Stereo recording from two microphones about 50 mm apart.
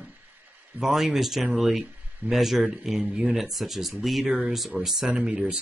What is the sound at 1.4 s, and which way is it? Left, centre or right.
Speech, centre.